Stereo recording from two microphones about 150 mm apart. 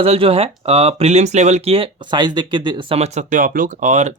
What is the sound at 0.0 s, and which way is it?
Speech, 40° right (ahead or behind).